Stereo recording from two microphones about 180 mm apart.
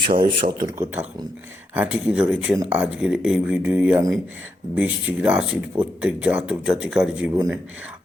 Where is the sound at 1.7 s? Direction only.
5° right (ahead or behind).